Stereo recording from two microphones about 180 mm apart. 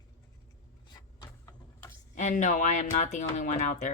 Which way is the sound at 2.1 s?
45° left (ahead or behind).